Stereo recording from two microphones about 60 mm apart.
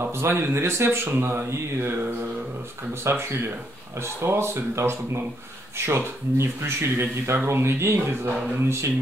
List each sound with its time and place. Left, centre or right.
0.0 s speech: right